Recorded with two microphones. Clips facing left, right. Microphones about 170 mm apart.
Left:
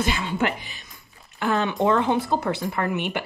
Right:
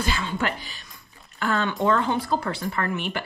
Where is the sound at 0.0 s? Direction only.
15° left (ahead or behind).